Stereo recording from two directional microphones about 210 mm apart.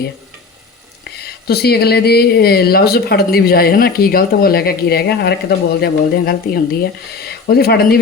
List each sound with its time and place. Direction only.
1.0 s speech: 50° left (ahead or behind)